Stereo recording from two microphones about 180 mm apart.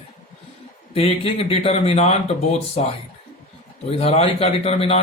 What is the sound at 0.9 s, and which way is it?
Speech, 35° left (ahead or behind).